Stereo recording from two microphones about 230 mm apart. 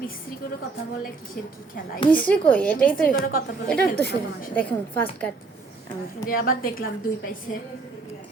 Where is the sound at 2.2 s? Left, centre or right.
Centre.